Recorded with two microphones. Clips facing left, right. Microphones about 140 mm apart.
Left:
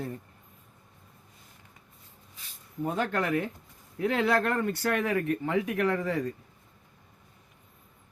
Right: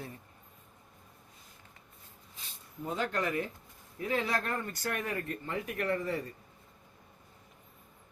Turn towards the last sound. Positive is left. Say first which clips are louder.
# left 5 dB
turn(degrees=90)